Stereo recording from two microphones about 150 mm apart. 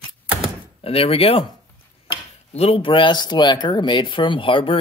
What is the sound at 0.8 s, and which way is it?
Speech, 40° left (ahead or behind).